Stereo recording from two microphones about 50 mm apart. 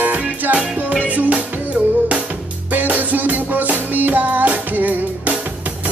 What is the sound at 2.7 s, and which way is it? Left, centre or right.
Music, right.